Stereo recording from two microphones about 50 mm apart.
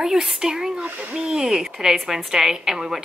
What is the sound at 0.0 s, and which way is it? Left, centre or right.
Speech, centre.